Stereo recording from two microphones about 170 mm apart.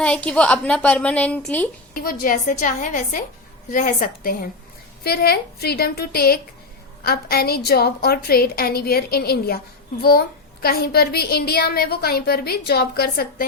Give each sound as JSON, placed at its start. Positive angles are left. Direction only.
{"t": 0.0, "sound": "a woman's voice", "side_deg": 5}
{"t": 1.9, "sound": "a woman's voice", "side_deg": 55}